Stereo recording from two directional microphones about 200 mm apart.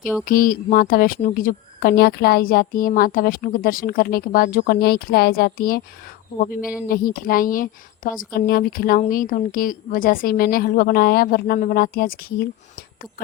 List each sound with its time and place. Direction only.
0.3 s a woman's voice: 45° left (ahead or behind)